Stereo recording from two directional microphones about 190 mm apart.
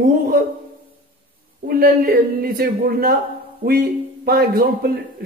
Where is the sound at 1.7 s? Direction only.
50° right (ahead or behind).